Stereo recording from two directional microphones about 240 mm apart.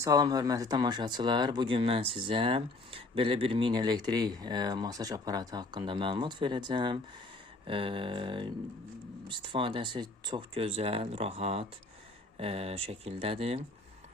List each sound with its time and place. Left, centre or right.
0.0 s speech: centre